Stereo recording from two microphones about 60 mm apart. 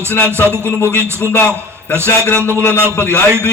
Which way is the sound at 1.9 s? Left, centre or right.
Right.